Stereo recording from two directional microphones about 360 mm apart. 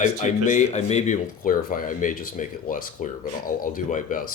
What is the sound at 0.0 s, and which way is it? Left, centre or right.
Speech, centre.